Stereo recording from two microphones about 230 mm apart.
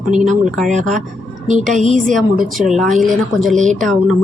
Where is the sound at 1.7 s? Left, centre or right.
Right.